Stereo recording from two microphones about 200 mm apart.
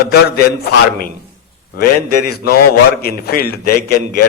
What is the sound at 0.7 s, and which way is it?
A man's voice, 50° left (ahead or behind).